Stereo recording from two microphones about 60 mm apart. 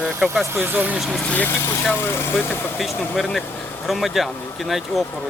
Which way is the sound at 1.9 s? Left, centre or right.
Left.